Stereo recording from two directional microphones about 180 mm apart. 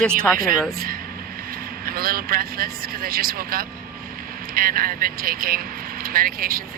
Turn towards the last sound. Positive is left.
turn(degrees=-55)  # may be behind; listen again after turning